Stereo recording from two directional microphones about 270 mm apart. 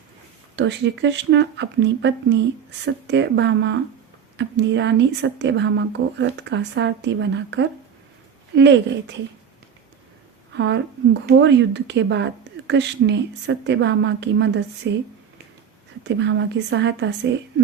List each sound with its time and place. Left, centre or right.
0.5 s speech: right
10.5 s a woman's voice: right
16.0 s speech: right